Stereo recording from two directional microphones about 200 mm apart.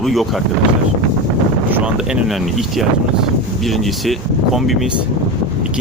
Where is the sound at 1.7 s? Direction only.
5° right (ahead or behind).